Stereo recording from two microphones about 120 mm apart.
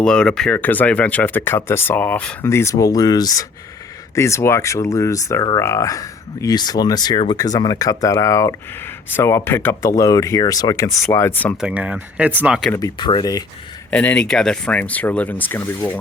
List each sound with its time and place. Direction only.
0.0 s speech: 5° left (ahead or behind)
2.5 s speech: 25° left (ahead or behind)
9.9 s speech: 30° left (ahead or behind)
11.6 s speech: 10° right (ahead or behind)
13.0 s speech: 40° left (ahead or behind)
13.9 s speech: 10° left (ahead or behind)